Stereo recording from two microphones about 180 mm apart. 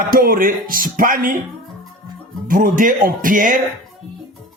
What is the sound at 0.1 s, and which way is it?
Speech, 55° right (ahead or behind).